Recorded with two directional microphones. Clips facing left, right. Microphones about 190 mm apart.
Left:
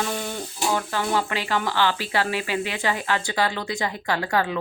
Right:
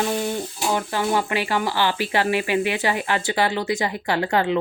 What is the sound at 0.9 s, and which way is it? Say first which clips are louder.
Speech: right 3 dB; 15° right (ahead or behind).